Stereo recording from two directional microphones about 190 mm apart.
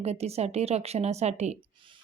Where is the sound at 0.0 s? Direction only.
35° right (ahead or behind).